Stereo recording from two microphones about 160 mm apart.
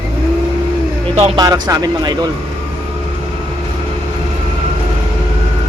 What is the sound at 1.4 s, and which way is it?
Speech, 25° right (ahead or behind).